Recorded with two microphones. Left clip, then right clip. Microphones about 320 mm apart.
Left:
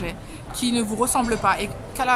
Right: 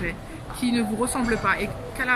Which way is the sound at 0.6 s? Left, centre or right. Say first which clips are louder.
Left 2 dB; centre.